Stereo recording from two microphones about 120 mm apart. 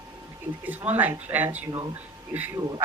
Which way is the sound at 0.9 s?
15° right (ahead or behind).